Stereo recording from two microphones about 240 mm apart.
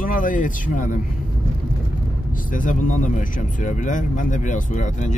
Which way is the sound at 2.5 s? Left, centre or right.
Left.